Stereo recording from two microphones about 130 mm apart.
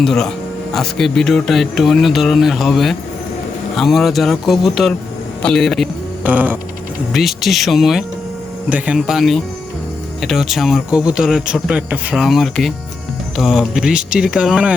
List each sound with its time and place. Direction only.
0.0 s speech: 5° left (ahead or behind)
6.2 s music: 10° right (ahead or behind)
7.1 s speech: centre (ahead or behind)